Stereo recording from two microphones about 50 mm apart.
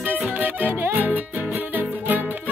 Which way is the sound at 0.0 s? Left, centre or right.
Right.